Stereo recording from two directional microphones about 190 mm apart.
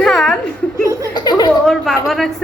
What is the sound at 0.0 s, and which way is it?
Chuckle, centre (ahead or behind).